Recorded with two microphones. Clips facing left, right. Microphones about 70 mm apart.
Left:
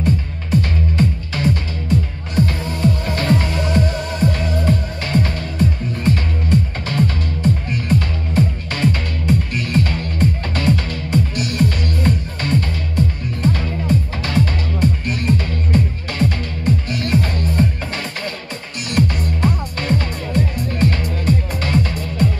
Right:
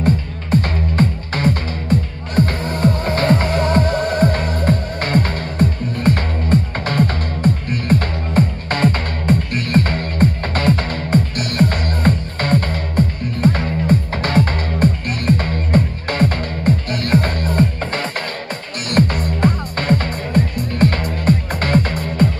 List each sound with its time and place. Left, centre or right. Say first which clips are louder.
0.0 s music: right 2 dB; right